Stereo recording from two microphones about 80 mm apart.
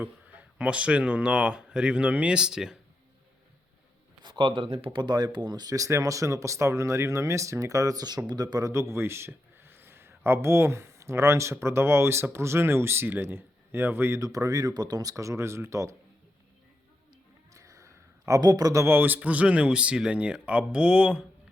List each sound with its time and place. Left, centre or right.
0.0 s speech: right
4.2 s speech: right
8.7 s a man's voice: right
14.2 s speech: right
15.1 s speech: right
17.5 s a sound: right
18.3 s speech: right
18.9 s speech: right